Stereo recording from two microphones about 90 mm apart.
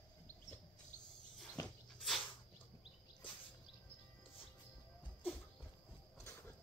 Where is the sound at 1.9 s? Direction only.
Centre (ahead or behind).